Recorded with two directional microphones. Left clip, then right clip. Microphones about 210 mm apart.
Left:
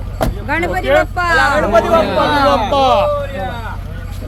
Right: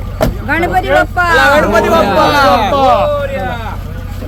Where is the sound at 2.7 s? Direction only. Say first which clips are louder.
Right 2 dB; 30° left (ahead or behind).